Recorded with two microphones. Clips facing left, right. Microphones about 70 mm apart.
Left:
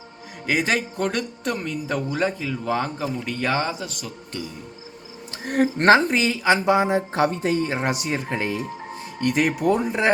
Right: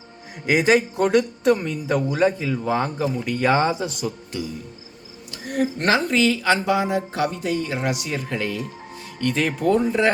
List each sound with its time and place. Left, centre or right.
0.4 s speech: centre
5.3 s speech: left
6.1 s speech: left